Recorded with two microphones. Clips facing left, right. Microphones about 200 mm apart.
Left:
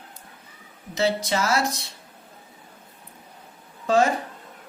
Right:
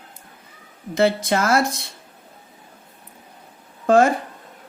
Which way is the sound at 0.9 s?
55° right (ahead or behind).